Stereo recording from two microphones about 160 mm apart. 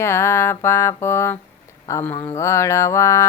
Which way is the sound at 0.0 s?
15° left (ahead or behind).